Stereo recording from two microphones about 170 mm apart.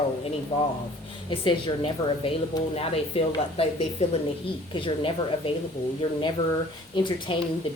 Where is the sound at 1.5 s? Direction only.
30° left (ahead or behind).